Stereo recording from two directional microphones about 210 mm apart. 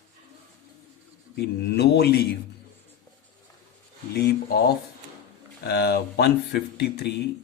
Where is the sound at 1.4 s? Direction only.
50° left (ahead or behind).